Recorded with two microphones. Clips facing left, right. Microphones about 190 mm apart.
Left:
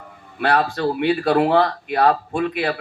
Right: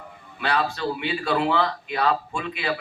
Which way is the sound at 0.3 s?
55° left (ahead or behind).